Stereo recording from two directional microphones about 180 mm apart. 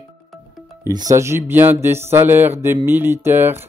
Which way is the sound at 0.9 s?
20° right (ahead or behind).